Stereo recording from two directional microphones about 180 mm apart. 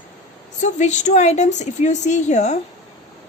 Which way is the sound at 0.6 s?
40° left (ahead or behind).